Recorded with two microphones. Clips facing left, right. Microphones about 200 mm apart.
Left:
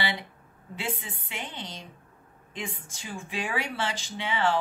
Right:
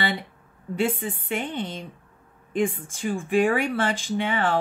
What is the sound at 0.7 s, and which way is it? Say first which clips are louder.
Speech: right 10 dB; 50° right (ahead or behind).